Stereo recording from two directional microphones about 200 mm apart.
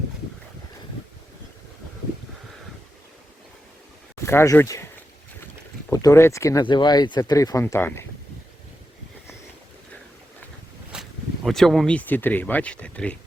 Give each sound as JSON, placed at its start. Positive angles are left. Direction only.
{"t": 4.2, "sound": "speech", "side_deg": 15}
{"t": 5.9, "sound": "speech", "side_deg": 15}
{"t": 10.9, "sound": "a sound", "side_deg": -5}
{"t": 11.4, "sound": "speech", "side_deg": 0}